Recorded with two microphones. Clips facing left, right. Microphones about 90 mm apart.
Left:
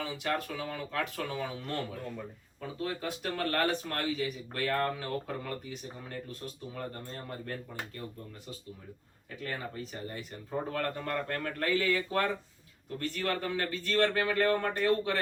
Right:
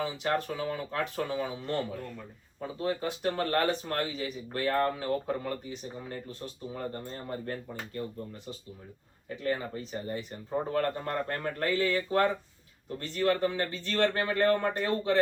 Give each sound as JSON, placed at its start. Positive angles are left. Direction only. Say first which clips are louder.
{"t": 0.0, "sound": "speech", "louder": "right 3 dB", "side_deg": -30}
{"t": 9.3, "sound": "speech", "louder": "right 6 dB", "side_deg": -25}